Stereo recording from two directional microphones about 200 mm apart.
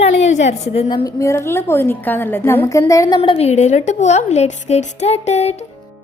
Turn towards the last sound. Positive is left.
turn(degrees=35)  # may be behind; listen again after turning